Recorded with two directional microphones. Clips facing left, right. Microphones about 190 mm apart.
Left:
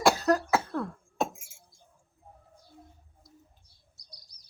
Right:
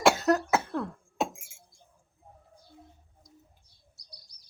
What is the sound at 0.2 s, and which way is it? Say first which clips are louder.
Cough: even; 25° right (ahead or behind).